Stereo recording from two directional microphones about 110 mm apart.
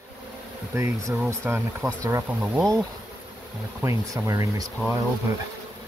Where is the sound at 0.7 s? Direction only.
30° right (ahead or behind).